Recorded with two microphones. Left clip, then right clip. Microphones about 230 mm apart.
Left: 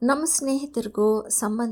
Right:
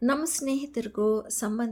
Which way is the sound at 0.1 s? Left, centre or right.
Centre.